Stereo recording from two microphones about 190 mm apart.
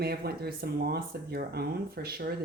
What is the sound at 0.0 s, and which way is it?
Speech, 55° right (ahead or behind).